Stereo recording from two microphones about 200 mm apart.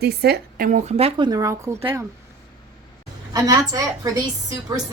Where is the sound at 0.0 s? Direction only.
55° right (ahead or behind); by 1.3 s 30° right (ahead or behind).